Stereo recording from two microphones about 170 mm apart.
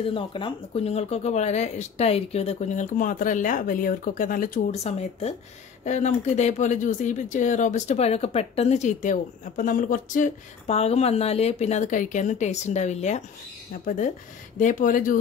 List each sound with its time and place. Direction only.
0.1 s speech: 30° left (ahead or behind); by 4.7 s 55° left (ahead or behind)
5.9 s speech: 45° left (ahead or behind)